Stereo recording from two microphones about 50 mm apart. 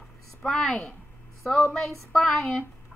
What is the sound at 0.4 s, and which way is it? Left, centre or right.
A woman's voice, centre.